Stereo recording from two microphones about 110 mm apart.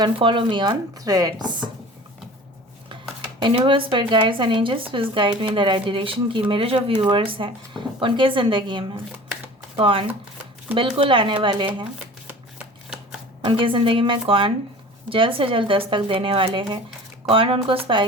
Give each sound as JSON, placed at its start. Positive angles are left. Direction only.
{"t": 0.0, "sound": "speech", "side_deg": -50}
{"t": 0.9, "sound": "chopping", "side_deg": -35}
{"t": 3.4, "sound": "speech", "side_deg": -50}
{"t": 12.5, "sound": "shuffling cards", "side_deg": -5}
{"t": 13.4, "sound": "a woman's voice", "side_deg": -50}